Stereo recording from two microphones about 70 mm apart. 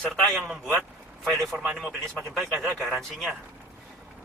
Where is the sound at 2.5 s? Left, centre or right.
Centre.